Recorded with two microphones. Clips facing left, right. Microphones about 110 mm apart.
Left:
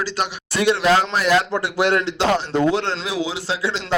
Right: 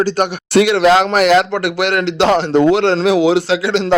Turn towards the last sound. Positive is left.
turn(degrees=-75)  # may be behind; listen again after turning